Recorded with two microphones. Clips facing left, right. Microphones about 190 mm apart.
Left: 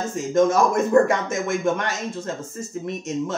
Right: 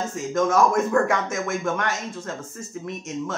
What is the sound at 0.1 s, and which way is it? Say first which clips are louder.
Speech: left 4 dB; 25° left (ahead or behind).